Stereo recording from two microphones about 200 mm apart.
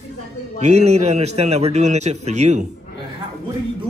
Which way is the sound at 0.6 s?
35° right (ahead or behind).